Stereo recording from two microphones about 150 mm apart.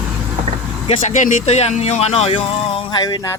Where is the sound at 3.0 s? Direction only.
25° left (ahead or behind).